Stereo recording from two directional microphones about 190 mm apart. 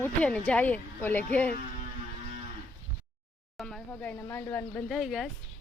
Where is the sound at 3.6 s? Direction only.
5° left (ahead or behind).